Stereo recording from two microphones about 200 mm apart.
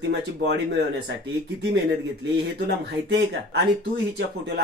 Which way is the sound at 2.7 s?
55° right (ahead or behind).